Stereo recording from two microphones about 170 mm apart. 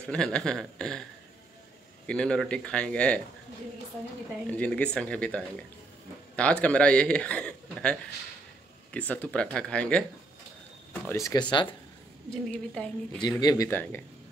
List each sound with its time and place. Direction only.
0.1 s speech: 5° left (ahead or behind)
2.0 s speech: 5° left (ahead or behind)
4.5 s a man's voice: 10° left (ahead or behind)
10.9 s speech: 15° left (ahead or behind)
12.4 s speech: 5° left (ahead or behind)
13.4 s a man's voice: 20° left (ahead or behind)